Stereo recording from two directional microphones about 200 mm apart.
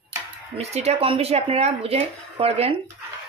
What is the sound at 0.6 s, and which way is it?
Speech, 30° right (ahead or behind).